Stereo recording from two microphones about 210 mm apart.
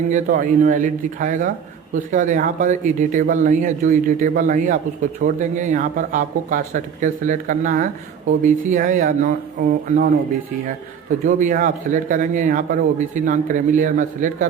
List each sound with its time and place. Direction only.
0.1 s a man's voice: 40° right (ahead or behind)
11.3 s a man's voice: 35° right (ahead or behind)